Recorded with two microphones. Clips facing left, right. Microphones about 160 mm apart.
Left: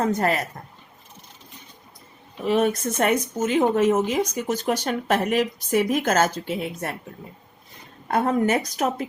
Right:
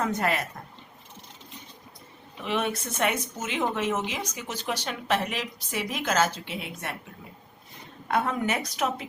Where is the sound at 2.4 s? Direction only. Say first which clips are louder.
Left 8 dB; 40° left (ahead or behind).